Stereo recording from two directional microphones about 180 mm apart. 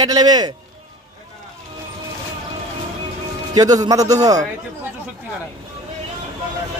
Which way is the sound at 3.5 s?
20° right (ahead or behind).